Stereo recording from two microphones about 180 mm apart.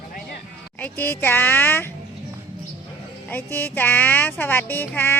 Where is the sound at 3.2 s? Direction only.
10° left (ahead or behind).